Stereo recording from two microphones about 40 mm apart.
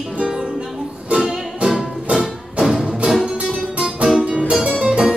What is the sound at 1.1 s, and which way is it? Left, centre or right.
Music, centre.